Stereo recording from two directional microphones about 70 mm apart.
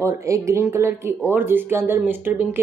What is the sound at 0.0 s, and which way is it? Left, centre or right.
Speech, right.